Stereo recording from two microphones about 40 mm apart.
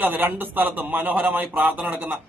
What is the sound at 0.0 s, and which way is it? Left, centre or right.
A man's voice, right.